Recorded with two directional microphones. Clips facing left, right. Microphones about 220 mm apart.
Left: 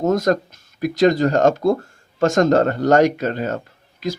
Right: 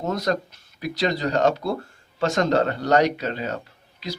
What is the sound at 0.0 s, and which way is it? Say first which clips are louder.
Speech: left 7 dB; 45° left (ahead or behind).